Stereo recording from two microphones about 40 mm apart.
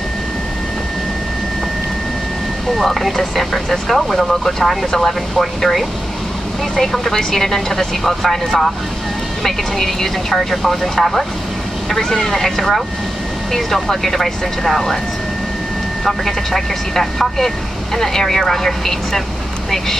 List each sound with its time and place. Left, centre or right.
2.8 s speech: centre
16.0 s speech: centre